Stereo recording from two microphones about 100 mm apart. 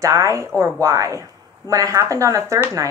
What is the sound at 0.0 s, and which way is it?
Speech, 30° right (ahead or behind).